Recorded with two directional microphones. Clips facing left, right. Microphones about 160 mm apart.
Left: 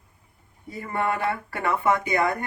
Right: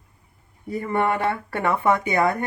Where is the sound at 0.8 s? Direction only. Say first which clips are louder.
Right 3 dB; 25° right (ahead or behind).